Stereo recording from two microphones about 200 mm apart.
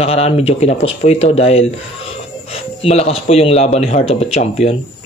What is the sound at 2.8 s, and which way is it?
Speech, 30° left (ahead or behind).